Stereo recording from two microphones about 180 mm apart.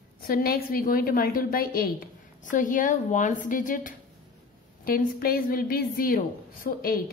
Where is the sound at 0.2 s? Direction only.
55° left (ahead or behind).